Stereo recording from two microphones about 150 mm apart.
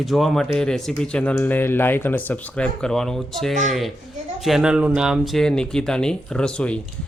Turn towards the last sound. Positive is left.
turn(degrees=5)  # may be behind; listen again after turning